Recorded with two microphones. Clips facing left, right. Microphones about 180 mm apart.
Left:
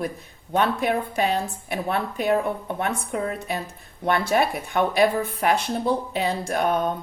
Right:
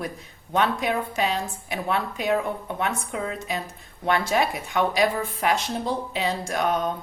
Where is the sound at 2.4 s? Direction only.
40° left (ahead or behind).